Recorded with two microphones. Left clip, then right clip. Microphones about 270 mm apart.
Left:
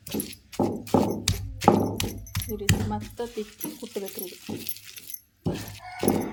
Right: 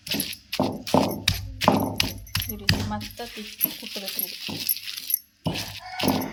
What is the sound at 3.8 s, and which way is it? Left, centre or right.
Dog, centre.